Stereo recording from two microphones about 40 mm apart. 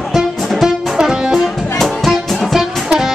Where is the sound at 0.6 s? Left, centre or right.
Centre.